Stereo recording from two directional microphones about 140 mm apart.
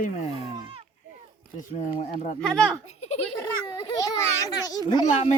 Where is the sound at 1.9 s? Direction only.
65° left (ahead or behind).